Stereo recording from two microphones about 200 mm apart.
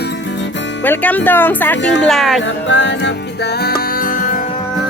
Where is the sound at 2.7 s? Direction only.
65° left (ahead or behind).